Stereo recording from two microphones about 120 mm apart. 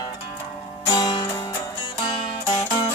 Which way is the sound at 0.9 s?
35° left (ahead or behind).